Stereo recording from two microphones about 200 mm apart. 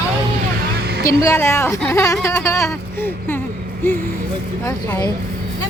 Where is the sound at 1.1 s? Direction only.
15° left (ahead or behind).